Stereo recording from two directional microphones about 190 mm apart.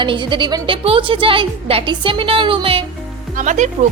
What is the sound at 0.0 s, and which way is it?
A woman's voice, 25° right (ahead or behind).